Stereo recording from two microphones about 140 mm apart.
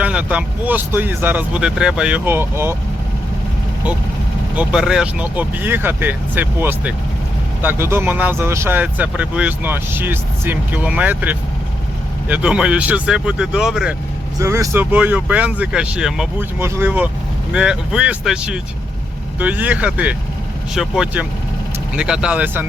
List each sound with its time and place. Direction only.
0.0 s speech: 10° right (ahead or behind)
4.5 s speech: 5° right (ahead or behind)
14.3 s speech: 20° right (ahead or behind); by 16.3 s 5° right (ahead or behind)
16.4 s speech: 15° right (ahead or behind)